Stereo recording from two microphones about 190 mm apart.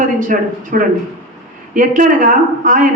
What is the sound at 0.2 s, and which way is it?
A woman's voice, 45° right (ahead or behind).